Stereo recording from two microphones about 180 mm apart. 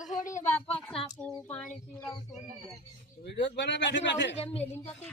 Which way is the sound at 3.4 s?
75° left (ahead or behind).